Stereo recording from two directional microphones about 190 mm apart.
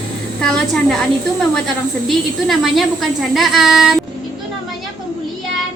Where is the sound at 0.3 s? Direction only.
5° left (ahead or behind).